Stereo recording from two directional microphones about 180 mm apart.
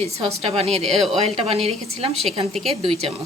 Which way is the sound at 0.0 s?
35° right (ahead or behind).